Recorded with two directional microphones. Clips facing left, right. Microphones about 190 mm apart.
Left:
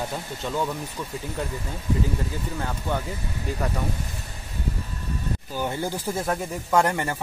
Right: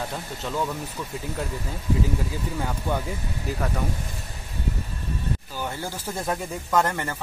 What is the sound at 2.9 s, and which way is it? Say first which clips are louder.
Speech: even; 10° right (ahead or behind).